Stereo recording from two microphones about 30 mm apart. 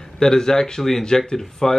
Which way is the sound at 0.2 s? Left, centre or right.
Left.